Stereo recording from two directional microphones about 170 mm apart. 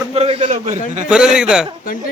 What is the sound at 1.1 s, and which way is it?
Speech, 5° right (ahead or behind).